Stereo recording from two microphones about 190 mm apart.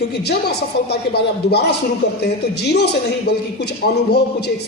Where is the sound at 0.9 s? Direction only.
60° left (ahead or behind).